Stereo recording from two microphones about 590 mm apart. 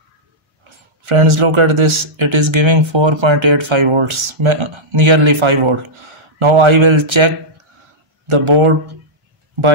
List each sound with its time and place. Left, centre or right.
0.7 s speech: right